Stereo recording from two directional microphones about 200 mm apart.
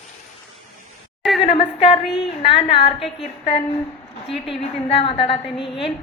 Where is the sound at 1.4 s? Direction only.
30° left (ahead or behind).